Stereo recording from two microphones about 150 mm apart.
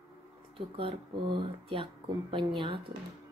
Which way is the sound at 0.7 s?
35° right (ahead or behind).